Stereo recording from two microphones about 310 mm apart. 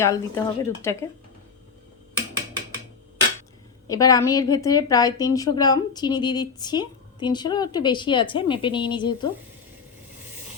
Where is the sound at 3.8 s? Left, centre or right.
Centre.